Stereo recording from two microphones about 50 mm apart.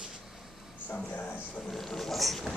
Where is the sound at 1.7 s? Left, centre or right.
Centre.